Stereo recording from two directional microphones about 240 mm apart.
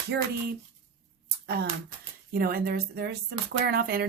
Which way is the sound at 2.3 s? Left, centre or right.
Right.